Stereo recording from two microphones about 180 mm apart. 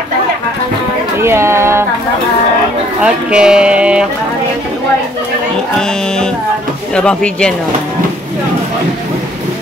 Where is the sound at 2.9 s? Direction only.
5° right (ahead or behind).